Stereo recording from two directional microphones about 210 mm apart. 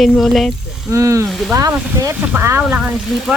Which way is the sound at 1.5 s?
15° right (ahead or behind).